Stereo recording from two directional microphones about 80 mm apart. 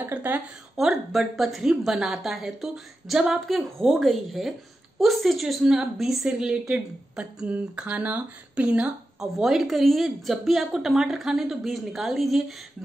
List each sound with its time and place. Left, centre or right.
0.0 s a woman's voice: right
0.7 s a woman's voice: centre
9.2 s a woman's voice: centre